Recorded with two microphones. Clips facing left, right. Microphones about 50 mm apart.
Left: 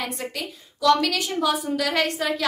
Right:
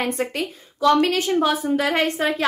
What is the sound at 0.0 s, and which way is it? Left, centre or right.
A woman's voice, right.